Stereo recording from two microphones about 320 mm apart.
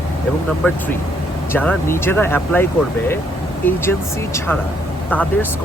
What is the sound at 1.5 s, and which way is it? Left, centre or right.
Speech, centre.